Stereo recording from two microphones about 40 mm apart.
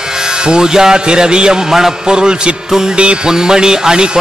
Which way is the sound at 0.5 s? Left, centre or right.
Centre.